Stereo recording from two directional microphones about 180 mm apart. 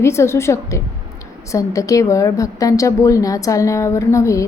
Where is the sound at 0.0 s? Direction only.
15° left (ahead or behind).